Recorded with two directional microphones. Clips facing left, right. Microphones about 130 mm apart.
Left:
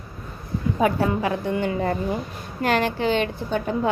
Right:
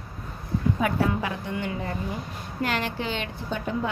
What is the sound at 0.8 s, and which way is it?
Speech, 35° left (ahead or behind).